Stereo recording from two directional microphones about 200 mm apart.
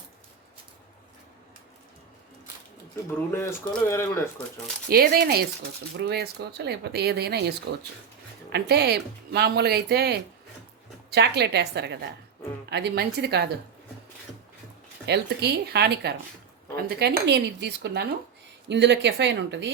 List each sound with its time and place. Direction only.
2.9 s speech: 15° left (ahead or behind)
4.9 s speech: 50° right (ahead or behind)
8.5 s speech: 55° right (ahead or behind)
15.0 s speech: 55° right (ahead or behind)